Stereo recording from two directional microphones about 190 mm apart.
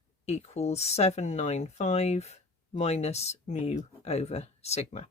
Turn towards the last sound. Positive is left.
turn(degrees=35)  # may be behind; listen again after turning